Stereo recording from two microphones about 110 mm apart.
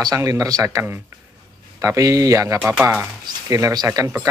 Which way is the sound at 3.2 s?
35° right (ahead or behind).